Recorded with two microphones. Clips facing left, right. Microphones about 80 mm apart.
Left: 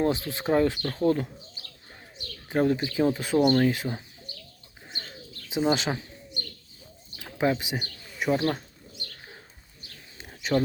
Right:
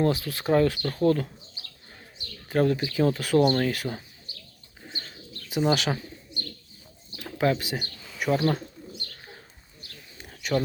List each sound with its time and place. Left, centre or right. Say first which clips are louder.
0.0 s speech: right 1 dB; left
2.5 s speech: right 1 dB; centre
5.5 s speech: right 1 dB; left
7.3 s speech: right 1 dB; centre
10.2 s bird: left 1 dB; left